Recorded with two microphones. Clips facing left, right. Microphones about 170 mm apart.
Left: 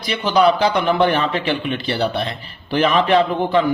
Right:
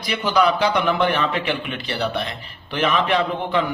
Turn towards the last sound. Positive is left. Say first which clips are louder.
# left 5 dB
turn(degrees=35)  # may be behind; listen again after turning